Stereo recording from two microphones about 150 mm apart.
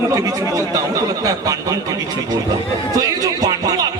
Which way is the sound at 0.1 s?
25° right (ahead or behind).